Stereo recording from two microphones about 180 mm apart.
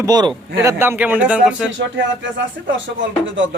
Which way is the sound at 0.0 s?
20° right (ahead or behind).